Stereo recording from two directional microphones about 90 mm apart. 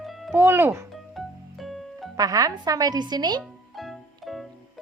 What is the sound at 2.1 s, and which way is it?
A woman's voice, 40° right (ahead or behind).